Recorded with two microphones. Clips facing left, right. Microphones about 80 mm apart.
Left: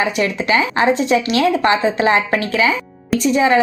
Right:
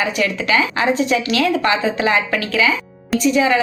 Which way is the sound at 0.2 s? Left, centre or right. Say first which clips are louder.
Left 1 dB; left.